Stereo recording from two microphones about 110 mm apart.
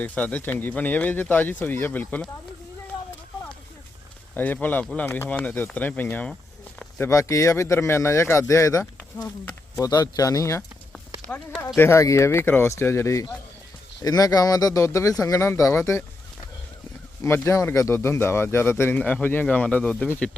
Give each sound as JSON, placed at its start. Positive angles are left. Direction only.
{"t": 0.0, "sound": "speech", "side_deg": 10}
{"t": 4.4, "sound": "speech", "side_deg": 15}
{"t": 7.0, "sound": "speech", "side_deg": 30}
{"t": 11.3, "sound": "speech", "side_deg": 10}
{"t": 11.8, "sound": "speech", "side_deg": 25}
{"t": 17.2, "sound": "speech", "side_deg": 20}